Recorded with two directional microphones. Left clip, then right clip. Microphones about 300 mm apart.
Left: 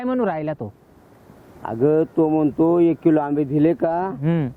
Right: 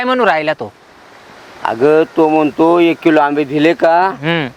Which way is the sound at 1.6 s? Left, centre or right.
Centre.